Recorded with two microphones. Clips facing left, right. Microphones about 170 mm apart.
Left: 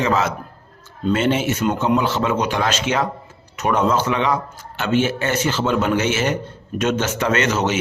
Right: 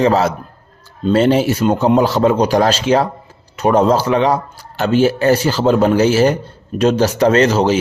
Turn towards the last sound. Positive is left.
turn(degrees=-30)  # may be behind; listen again after turning